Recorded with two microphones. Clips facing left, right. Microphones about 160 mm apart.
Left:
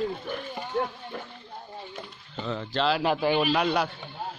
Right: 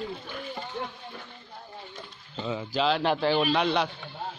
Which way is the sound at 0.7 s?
50° left (ahead or behind).